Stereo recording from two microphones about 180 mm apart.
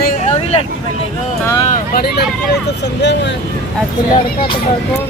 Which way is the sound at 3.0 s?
75° left (ahead or behind).